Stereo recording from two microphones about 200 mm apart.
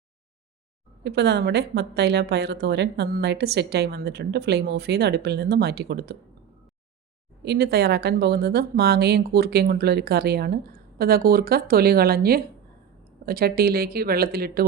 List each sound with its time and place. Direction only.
1.0 s a woman's voice: 55° right (ahead or behind)
7.4 s speech: 55° right (ahead or behind)